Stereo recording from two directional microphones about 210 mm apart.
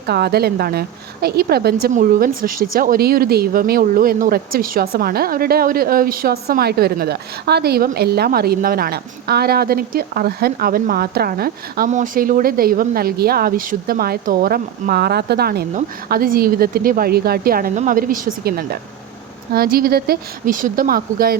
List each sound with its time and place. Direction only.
0.1 s speech: 50° right (ahead or behind)